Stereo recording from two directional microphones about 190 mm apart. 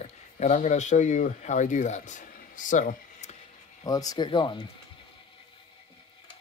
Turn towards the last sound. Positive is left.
turn(degrees=25)  # may be behind; listen again after turning